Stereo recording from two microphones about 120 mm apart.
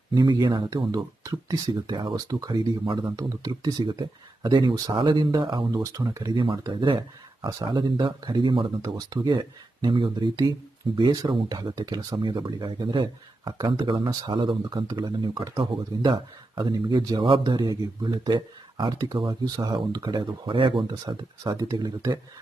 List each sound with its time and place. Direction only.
0.1 s speech: 35° right (ahead or behind)
6.3 s speech: 45° right (ahead or behind)
8.8 s speech: 30° right (ahead or behind)